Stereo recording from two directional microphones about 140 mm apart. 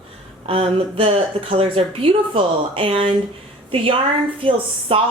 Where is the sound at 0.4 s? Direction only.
45° right (ahead or behind).